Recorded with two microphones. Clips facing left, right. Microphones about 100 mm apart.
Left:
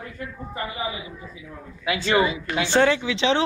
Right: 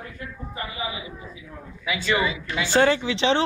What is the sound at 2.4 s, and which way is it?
Speech, 55° left (ahead or behind).